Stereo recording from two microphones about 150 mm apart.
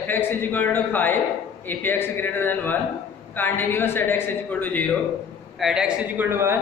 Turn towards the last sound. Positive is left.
turn(degrees=-15)  # may be behind; listen again after turning